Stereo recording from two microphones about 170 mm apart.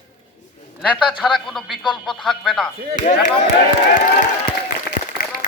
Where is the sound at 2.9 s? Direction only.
45° left (ahead or behind).